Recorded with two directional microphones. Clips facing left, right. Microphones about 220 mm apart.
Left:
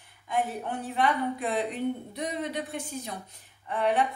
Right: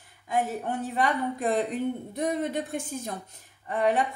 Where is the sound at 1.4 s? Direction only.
45° right (ahead or behind).